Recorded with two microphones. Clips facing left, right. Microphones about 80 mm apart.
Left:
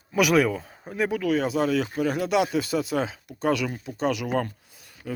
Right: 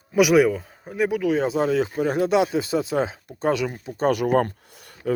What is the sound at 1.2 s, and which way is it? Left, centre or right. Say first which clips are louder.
Speech: right 1 dB; right.